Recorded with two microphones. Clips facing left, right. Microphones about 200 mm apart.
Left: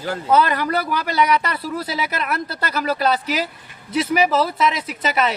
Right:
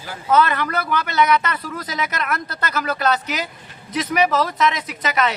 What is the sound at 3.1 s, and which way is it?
Speech, 30° left (ahead or behind).